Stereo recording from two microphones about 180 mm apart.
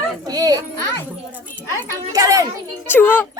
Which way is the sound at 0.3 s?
20° right (ahead or behind).